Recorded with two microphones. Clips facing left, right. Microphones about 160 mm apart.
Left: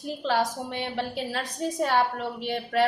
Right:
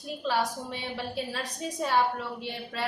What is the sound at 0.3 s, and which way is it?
A woman's voice, 70° left (ahead or behind).